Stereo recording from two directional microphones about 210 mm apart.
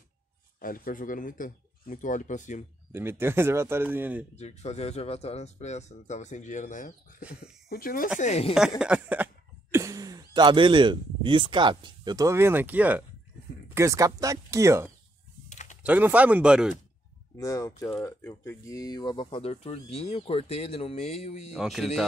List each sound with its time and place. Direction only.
0.6 s a man's voice: 40° left (ahead or behind)
2.9 s a man's voice: 10° right (ahead or behind)
4.4 s a man's voice: 30° left (ahead or behind)
8.2 s a man's voice: 30° left (ahead or behind)
8.5 s a man's voice: 5° right (ahead or behind)
15.5 s typing: 35° left (ahead or behind)
15.8 s a man's voice: 5° right (ahead or behind)
17.4 s speech: 15° left (ahead or behind)
21.5 s speech: centre (ahead or behind)